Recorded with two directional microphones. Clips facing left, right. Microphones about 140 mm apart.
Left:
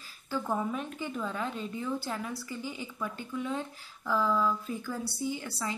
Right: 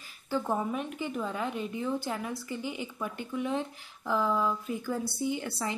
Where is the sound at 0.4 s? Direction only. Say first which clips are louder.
Right 1 dB; 20° right (ahead or behind).